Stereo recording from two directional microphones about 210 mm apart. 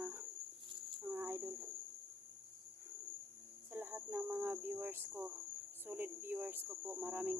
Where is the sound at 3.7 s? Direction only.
10° right (ahead or behind).